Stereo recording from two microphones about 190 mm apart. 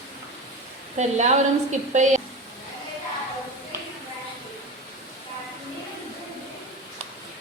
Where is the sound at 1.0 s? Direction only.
40° right (ahead or behind).